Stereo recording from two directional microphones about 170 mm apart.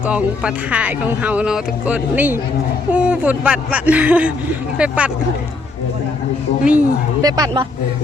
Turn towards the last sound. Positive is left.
turn(degrees=-20)  # may be behind; listen again after turning